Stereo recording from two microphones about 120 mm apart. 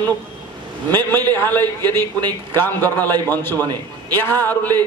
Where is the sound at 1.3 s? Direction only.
15° left (ahead or behind).